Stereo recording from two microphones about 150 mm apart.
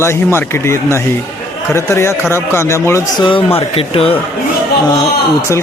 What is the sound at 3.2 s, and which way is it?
Speech, 35° left (ahead or behind).